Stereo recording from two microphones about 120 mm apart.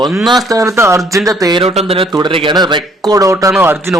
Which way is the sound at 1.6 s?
60° right (ahead or behind).